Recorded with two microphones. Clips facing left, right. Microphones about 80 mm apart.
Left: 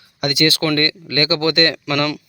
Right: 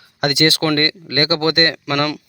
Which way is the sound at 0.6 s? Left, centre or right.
Right.